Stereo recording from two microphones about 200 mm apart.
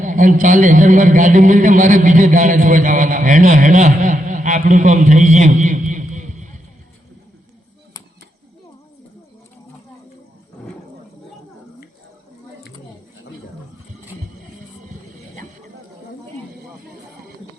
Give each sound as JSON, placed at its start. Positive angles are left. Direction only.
{"t": 0.0, "sound": "a man's voice", "side_deg": -40}